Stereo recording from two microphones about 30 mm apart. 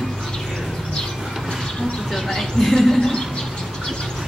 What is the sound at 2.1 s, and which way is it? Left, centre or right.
Speech, centre.